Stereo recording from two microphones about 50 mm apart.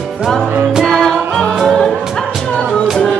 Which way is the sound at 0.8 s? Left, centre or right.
Centre.